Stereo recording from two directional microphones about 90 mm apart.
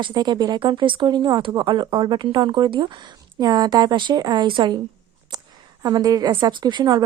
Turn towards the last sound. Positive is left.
turn(degrees=-55)  # may be behind; listen again after turning